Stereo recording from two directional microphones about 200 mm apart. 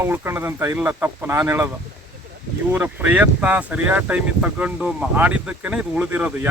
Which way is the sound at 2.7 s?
10° right (ahead or behind).